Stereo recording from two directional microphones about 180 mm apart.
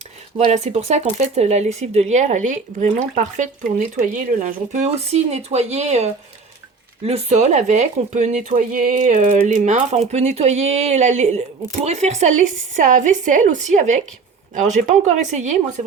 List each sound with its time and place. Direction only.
0.3 s speech: 40° right (ahead or behind)